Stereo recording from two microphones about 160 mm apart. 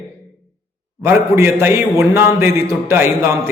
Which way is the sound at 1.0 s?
15° right (ahead or behind).